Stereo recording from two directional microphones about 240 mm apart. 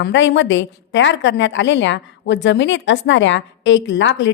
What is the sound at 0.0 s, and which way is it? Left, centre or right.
A woman's voice, left.